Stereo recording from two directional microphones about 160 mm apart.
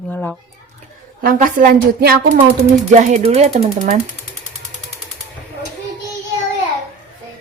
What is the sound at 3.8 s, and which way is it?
Speech, 55° right (ahead or behind).